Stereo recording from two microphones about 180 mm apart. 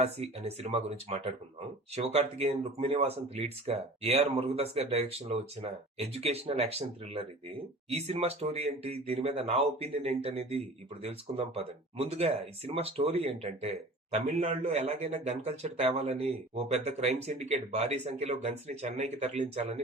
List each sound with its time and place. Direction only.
0.0 s speech: 35° right (ahead or behind)